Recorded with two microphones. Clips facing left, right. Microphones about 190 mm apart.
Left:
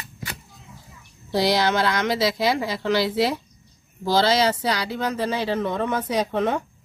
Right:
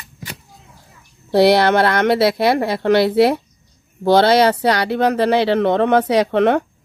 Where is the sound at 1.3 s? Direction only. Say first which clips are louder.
Right 8 dB; 65° right (ahead or behind).